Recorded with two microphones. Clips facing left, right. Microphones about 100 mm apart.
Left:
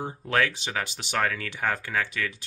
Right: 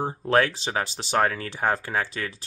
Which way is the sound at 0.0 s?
30° right (ahead or behind).